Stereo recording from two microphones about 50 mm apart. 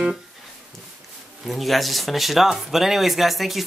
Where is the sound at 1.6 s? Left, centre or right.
Centre.